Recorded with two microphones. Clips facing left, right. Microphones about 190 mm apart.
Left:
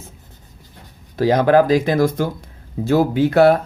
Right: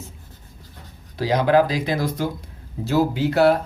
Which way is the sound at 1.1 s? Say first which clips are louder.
Left 4 dB; 50° left (ahead or behind).